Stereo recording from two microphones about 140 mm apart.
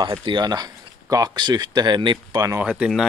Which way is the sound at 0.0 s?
35° right (ahead or behind).